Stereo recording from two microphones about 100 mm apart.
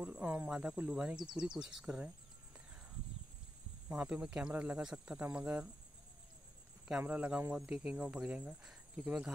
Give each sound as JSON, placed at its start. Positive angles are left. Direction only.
{"t": 0.0, "sound": "speech", "side_deg": -15}
{"t": 3.9, "sound": "speech", "side_deg": -10}
{"t": 7.0, "sound": "speech", "side_deg": -15}